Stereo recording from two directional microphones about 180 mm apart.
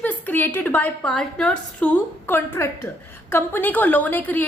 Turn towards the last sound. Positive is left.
turn(degrees=10)  # may be behind; listen again after turning